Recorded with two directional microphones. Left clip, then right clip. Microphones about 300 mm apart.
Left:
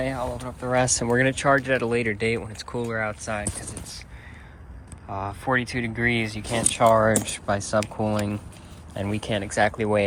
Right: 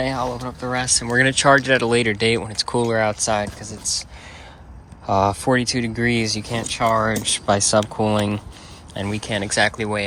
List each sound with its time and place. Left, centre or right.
0.0 s speech: centre
5.5 s speech: centre
6.6 s speech: centre